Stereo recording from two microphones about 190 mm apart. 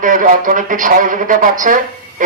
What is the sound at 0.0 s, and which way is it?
A man's voice, 45° right (ahead or behind).